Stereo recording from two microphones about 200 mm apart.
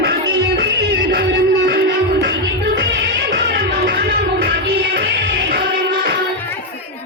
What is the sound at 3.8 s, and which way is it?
Music, 50° right (ahead or behind).